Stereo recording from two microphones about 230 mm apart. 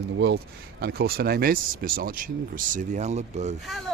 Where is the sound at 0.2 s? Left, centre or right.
Right.